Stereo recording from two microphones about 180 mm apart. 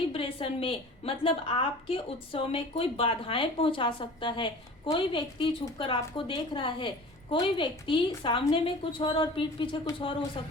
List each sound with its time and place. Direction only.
0.1 s a woman's voice: 30° left (ahead or behind)